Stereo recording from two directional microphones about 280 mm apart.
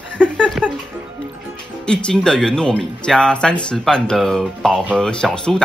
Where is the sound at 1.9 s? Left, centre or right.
Centre.